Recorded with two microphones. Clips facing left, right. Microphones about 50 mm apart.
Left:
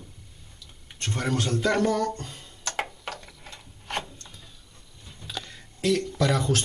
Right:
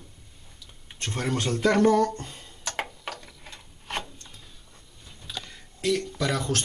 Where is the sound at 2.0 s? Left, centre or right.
Centre.